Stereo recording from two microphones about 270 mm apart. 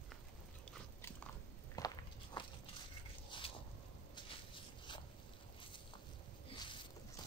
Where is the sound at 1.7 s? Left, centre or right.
Centre.